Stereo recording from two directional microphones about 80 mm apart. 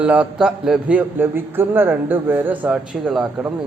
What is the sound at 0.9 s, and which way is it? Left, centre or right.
A man's voice, right.